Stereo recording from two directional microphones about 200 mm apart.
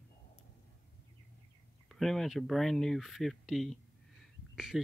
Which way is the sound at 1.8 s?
Centre (ahead or behind).